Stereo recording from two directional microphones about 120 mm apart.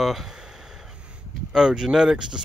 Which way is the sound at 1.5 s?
5° right (ahead or behind).